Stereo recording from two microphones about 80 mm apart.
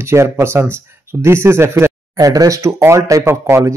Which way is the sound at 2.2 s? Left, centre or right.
Right.